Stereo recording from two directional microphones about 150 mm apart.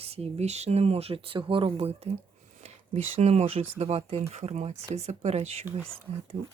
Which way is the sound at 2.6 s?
45° right (ahead or behind).